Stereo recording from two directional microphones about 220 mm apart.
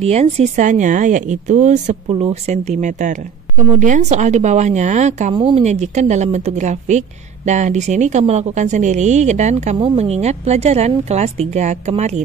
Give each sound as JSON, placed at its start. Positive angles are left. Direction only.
{"t": 0.0, "sound": "a woman's voice", "side_deg": -30}